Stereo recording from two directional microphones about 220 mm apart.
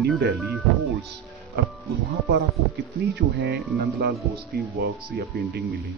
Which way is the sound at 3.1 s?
50° right (ahead or behind).